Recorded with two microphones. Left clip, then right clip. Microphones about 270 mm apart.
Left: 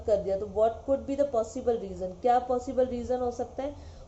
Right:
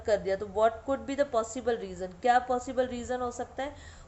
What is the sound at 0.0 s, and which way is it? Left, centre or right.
A woman's voice, right.